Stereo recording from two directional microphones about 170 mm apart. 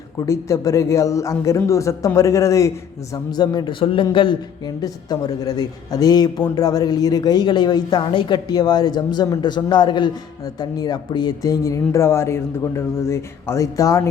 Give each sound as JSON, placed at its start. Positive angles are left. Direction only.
{"t": 0.3, "sound": "a woman's voice", "side_deg": 20}